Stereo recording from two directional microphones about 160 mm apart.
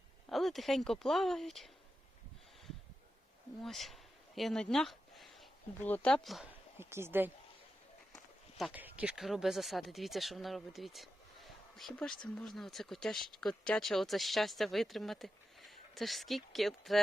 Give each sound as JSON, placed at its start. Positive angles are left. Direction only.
{"t": 0.3, "sound": "speech", "side_deg": 0}
{"t": 3.6, "sound": "a sound", "side_deg": 0}
{"t": 5.8, "sound": "speech", "side_deg": 10}
{"t": 6.7, "sound": "speech", "side_deg": -15}
{"t": 8.1, "sound": "walk", "side_deg": 0}
{"t": 8.7, "sound": "a woman's voice", "side_deg": -10}